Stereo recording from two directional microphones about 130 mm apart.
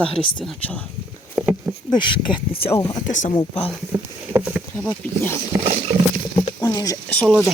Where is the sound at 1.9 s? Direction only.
40° left (ahead or behind).